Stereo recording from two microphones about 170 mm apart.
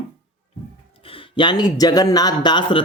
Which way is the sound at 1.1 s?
25° left (ahead or behind).